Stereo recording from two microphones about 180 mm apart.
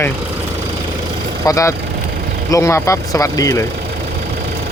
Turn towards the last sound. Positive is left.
turn(degrees=20)  # may be behind; listen again after turning